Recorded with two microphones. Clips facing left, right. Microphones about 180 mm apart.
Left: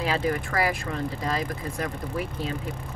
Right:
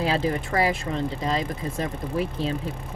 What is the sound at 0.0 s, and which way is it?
Speech, 30° right (ahead or behind).